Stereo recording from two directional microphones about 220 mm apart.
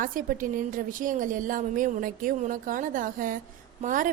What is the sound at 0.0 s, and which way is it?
A woman's voice, 35° right (ahead or behind).